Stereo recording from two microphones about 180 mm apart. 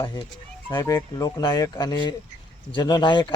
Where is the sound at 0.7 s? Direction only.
20° left (ahead or behind).